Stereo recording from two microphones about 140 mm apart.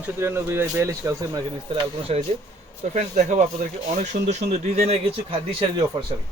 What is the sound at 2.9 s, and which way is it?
Speech, 60° right (ahead or behind).